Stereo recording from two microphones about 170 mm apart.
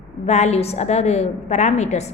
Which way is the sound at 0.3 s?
40° left (ahead or behind).